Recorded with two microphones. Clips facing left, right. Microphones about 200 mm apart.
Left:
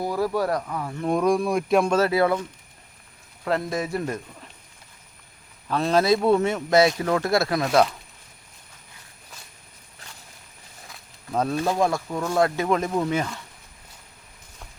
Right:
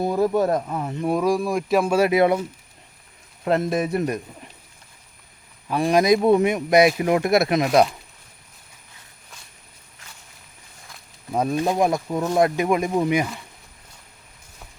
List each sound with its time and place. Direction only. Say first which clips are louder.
0.0 s speech: right 4 dB; 20° right (ahead or behind)
1.0 s speech: even; 5° right (ahead or behind); by 2.4 s 20° right (ahead or behind)
3.4 s speech: right 4 dB; 20° right (ahead or behind)
5.6 s speech: right 2 dB; 15° right (ahead or behind)
11.3 s speech: right 2 dB; 15° right (ahead or behind)